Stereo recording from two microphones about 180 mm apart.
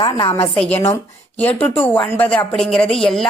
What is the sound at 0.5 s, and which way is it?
A woman's voice, 10° left (ahead or behind).